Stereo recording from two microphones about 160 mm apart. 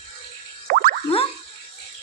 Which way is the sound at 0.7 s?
70° right (ahead or behind).